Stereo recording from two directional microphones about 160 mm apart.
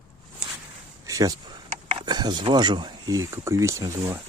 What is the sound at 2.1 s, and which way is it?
Speech, 25° right (ahead or behind).